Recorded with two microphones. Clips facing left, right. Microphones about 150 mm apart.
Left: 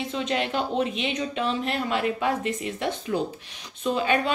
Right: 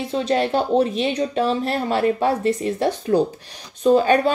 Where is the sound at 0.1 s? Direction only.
35° right (ahead or behind).